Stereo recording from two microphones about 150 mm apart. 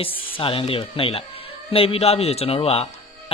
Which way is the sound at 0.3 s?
35° left (ahead or behind).